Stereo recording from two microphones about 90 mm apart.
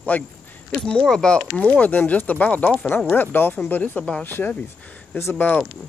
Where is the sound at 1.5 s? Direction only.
15° left (ahead or behind).